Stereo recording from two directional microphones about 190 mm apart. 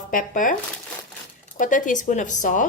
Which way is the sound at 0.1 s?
45° left (ahead or behind).